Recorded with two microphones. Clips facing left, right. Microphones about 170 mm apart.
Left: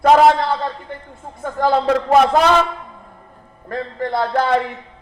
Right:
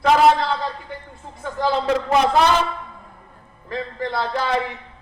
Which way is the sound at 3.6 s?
50° left (ahead or behind).